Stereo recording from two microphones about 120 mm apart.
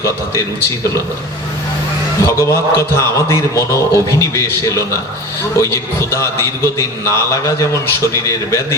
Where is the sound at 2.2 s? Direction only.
25° left (ahead or behind).